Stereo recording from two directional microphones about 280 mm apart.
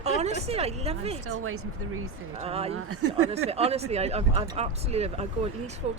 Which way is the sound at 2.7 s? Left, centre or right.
Right.